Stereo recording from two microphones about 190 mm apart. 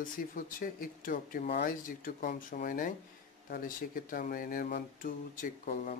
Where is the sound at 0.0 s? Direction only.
45° left (ahead or behind).